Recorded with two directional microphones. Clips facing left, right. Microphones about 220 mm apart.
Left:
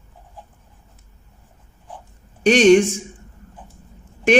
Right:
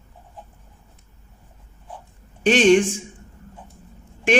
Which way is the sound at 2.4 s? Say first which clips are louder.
Left 3 dB; 40° left (ahead or behind).